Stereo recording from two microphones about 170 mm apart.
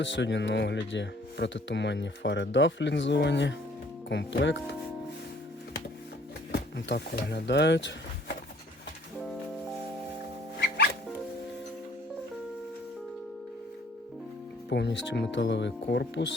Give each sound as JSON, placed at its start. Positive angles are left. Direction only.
{"t": 0.0, "sound": "speech", "side_deg": 90}
{"t": 6.5, "sound": "speech", "side_deg": 80}
{"t": 14.7, "sound": "speech", "side_deg": 90}